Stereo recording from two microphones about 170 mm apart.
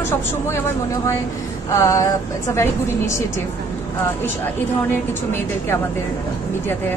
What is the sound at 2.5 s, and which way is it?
Speech, 15° left (ahead or behind).